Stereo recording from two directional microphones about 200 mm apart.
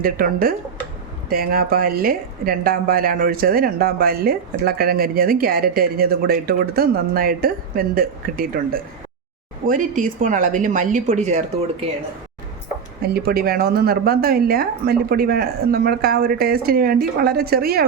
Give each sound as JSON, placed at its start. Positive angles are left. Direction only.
{"t": 0.0, "sound": "a woman's voice", "side_deg": -45}
{"t": 9.6, "sound": "speech", "side_deg": -40}
{"t": 13.0, "sound": "a woman's voice", "side_deg": -50}